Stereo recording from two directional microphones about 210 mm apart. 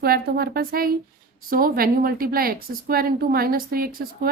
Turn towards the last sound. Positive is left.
turn(degrees=-45)  # may be behind; listen again after turning